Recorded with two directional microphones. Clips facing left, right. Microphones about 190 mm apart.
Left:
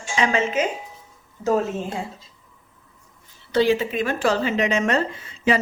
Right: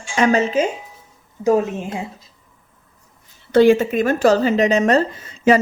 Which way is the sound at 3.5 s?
50° right (ahead or behind).